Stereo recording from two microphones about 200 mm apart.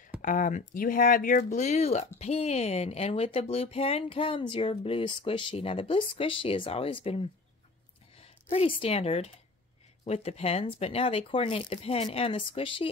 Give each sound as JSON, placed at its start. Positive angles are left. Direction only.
{"t": 0.2, "sound": "speech", "side_deg": 40}